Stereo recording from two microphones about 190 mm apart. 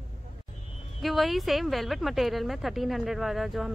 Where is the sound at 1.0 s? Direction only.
Centre (ahead or behind).